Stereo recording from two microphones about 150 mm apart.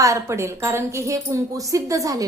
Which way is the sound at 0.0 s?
20° right (ahead or behind).